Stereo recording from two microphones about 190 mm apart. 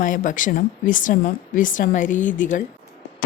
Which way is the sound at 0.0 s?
45° left (ahead or behind).